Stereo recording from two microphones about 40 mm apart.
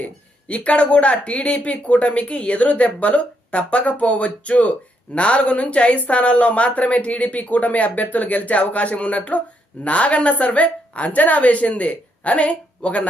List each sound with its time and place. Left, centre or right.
0.0 s speech: left